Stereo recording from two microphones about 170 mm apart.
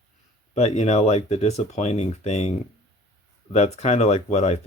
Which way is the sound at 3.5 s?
40° left (ahead or behind).